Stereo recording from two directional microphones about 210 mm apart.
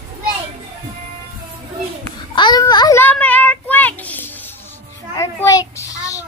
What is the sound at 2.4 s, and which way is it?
Child singing, 20° left (ahead or behind).